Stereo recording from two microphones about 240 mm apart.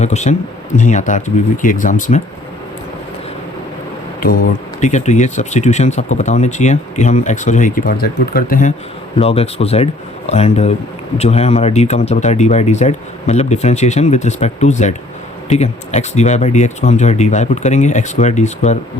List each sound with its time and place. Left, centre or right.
0.0 s speech: left
4.2 s speech: left
9.1 s speech: left